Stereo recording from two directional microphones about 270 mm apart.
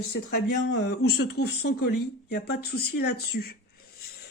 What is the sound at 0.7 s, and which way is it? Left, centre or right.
Speech, left.